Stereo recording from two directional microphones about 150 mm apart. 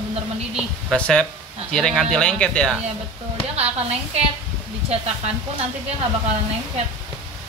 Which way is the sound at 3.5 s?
45° right (ahead or behind).